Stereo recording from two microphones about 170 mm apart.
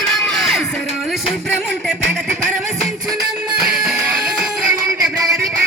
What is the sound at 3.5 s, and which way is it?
Music, centre (ahead or behind).